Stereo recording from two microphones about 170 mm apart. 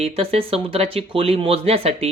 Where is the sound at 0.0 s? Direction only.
35° right (ahead or behind).